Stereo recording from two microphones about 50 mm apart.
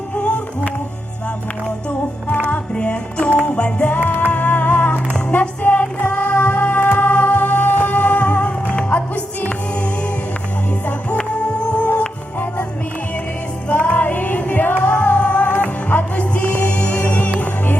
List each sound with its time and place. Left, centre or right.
0.2 s music: left
2.7 s music: left
11.2 s music: left
11.9 s music: left
13.7 s music: left